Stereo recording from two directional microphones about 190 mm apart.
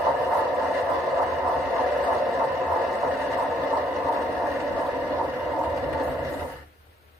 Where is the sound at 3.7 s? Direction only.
15° right (ahead or behind).